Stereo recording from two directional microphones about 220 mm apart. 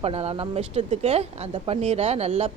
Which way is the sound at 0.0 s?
30° right (ahead or behind).